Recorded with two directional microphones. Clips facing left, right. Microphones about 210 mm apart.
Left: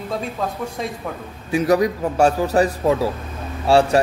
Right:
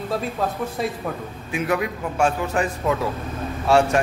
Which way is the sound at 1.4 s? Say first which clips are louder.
Left 7 dB; 40° left (ahead or behind).